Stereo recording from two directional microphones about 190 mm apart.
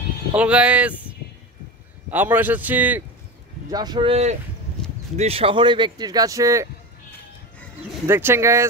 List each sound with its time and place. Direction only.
0.3 s a man's voice: 5° right (ahead or behind)
2.0 s a man's voice: 10° right (ahead or behind)
3.7 s speech: 20° right (ahead or behind)
8.1 s a man's voice: 10° right (ahead or behind)